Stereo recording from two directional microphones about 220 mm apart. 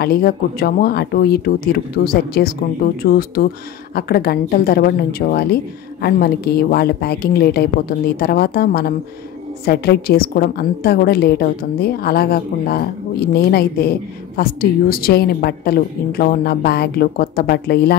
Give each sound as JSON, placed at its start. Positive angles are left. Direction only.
{"t": 0.0, "sound": "a woman's voice", "side_deg": 45}